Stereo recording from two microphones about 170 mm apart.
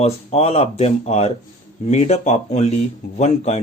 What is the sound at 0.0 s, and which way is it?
Speech, 35° left (ahead or behind).